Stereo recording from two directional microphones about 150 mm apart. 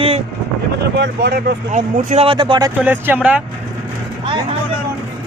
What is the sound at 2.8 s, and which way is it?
Speech, 15° right (ahead or behind).